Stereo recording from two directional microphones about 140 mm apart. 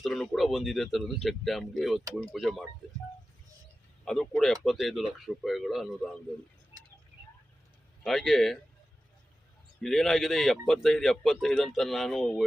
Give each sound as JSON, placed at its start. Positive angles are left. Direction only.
{"t": 0.0, "sound": "a man's voice", "side_deg": 0}
{"t": 4.0, "sound": "a man's voice", "side_deg": 5}
{"t": 8.0, "sound": "a man's voice", "side_deg": 0}
{"t": 9.8, "sound": "a man's voice", "side_deg": 0}